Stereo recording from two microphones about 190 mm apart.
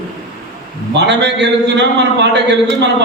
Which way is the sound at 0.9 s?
65° right (ahead or behind).